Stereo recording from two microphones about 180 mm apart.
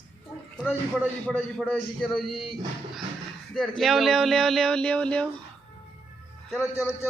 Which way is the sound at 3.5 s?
Centre (ahead or behind).